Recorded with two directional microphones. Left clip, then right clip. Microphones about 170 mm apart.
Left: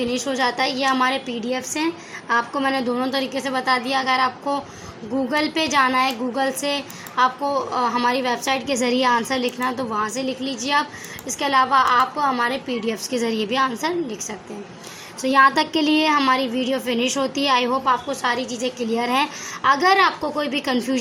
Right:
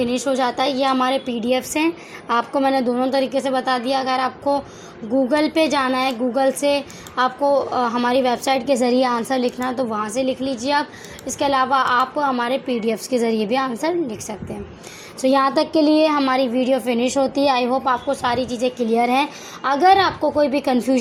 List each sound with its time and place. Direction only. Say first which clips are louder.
0.0 s speech: right 2 dB; 40° right (ahead or behind)
15.2 s a woman's voice: left 1 dB; 30° right (ahead or behind)
18.1 s speech: right 2 dB; 35° right (ahead or behind)